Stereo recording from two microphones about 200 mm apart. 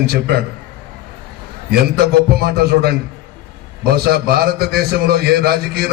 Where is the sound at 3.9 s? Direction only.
50° right (ahead or behind).